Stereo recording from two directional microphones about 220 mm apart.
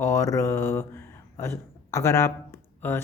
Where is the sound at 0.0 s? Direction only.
15° left (ahead or behind).